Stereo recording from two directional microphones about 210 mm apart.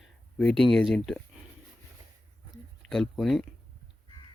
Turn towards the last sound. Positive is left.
turn(degrees=0)  # may be behind; listen again after turning